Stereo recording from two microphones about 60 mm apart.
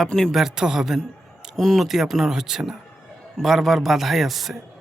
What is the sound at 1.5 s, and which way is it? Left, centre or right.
Speech, centre.